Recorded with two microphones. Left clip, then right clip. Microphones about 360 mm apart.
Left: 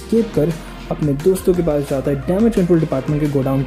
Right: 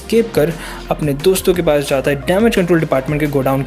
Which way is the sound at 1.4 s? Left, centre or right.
Right.